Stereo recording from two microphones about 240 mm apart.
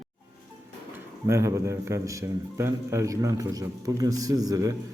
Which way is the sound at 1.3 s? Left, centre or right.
Centre.